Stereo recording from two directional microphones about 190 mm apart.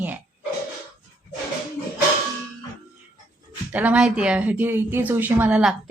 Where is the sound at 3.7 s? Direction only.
10° right (ahead or behind).